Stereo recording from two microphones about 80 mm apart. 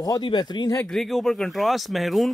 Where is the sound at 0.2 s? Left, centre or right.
Left.